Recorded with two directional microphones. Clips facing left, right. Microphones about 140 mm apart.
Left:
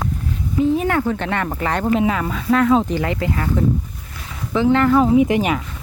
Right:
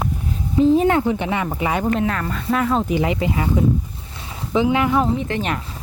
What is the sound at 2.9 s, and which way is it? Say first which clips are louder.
Speech: right 1 dB; 15° right (ahead or behind).